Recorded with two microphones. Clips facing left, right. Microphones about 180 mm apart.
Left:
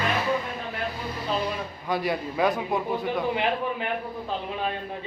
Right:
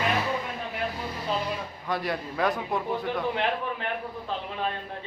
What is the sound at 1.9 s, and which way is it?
A man's voice, 5° left (ahead or behind).